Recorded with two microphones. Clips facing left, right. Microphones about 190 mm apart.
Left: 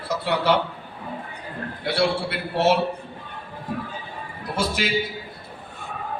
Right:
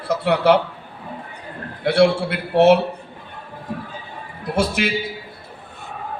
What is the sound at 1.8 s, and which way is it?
Speech, 55° right (ahead or behind).